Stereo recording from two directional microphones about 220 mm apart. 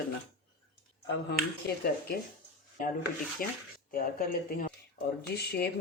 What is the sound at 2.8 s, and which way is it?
Speech, 40° left (ahead or behind).